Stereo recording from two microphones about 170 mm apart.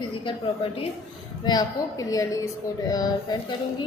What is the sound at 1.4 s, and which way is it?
A woman's voice, 25° left (ahead or behind).